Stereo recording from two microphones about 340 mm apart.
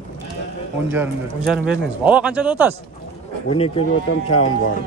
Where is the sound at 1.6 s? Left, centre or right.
Centre.